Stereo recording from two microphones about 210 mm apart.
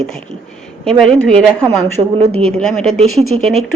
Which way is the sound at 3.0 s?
30° right (ahead or behind).